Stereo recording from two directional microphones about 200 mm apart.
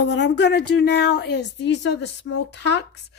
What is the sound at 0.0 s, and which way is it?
Speech, 60° left (ahead or behind).